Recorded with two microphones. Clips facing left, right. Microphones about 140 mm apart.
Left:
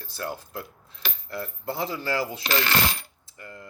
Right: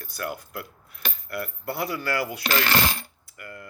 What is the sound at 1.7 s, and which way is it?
Speech, 25° left (ahead or behind).